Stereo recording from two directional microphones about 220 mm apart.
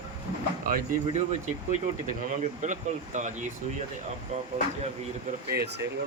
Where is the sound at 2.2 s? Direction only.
35° right (ahead or behind).